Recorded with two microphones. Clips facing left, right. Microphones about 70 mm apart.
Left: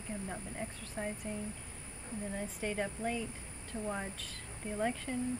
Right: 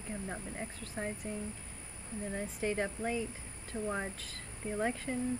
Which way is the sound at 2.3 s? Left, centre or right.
Centre.